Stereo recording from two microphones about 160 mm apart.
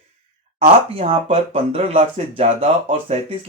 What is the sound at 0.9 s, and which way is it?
Speech, 35° right (ahead or behind).